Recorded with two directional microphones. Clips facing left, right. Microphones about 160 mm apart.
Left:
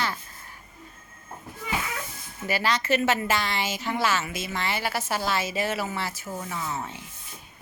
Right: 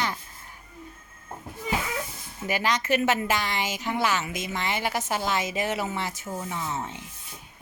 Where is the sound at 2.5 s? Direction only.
15° right (ahead or behind).